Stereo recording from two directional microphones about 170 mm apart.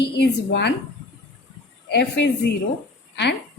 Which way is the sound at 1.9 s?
85° left.